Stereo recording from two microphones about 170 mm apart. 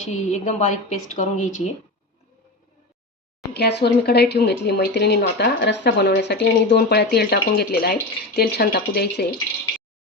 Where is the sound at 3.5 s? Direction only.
80° left.